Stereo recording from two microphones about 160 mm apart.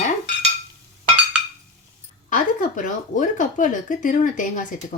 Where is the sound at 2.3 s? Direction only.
55° left (ahead or behind).